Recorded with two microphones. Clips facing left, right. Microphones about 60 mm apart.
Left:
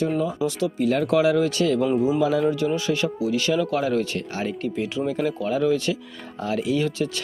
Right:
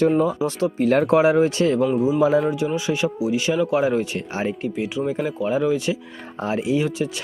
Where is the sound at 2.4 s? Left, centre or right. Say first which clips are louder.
Right 1 dB; centre.